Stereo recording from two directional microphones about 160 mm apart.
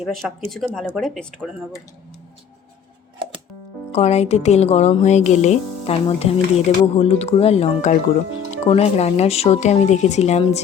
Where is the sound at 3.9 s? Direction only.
40° left (ahead or behind).